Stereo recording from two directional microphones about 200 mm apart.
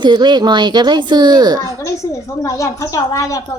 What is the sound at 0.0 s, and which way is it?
Speech, 20° right (ahead or behind).